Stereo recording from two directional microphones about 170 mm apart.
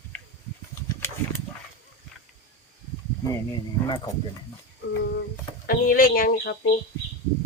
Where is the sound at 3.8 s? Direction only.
10° left (ahead or behind).